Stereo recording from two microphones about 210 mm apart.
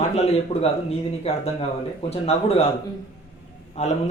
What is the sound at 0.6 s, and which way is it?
Speech, 30° left (ahead or behind).